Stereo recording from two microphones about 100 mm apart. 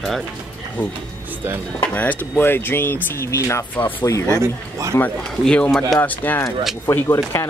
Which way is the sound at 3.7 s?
20° left (ahead or behind).